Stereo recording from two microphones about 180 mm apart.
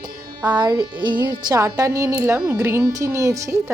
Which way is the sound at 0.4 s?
25° right (ahead or behind).